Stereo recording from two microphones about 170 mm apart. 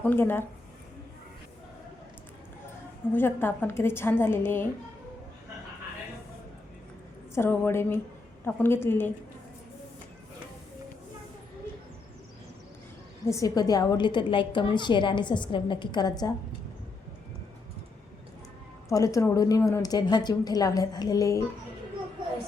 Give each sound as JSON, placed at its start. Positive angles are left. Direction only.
{"t": 0.0, "sound": "a woman's voice", "side_deg": 10}
{"t": 3.1, "sound": "a woman's voice", "side_deg": 15}
{"t": 7.3, "sound": "a woman's voice", "side_deg": 15}
{"t": 13.2, "sound": "a woman's voice", "side_deg": 20}
{"t": 18.9, "sound": "a woman's voice", "side_deg": 20}